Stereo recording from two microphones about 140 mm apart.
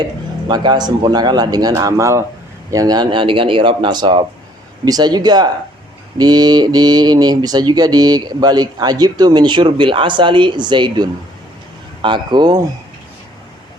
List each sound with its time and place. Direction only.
0.4 s speech: 30° right (ahead or behind)